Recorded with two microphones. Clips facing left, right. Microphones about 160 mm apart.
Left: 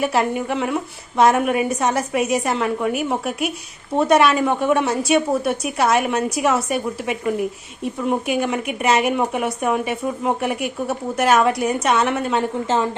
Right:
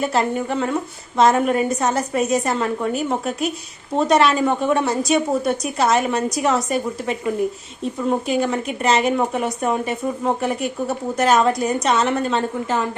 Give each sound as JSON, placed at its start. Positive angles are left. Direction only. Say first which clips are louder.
{"t": 0.0, "sound": "speech", "louder": "even", "side_deg": 10}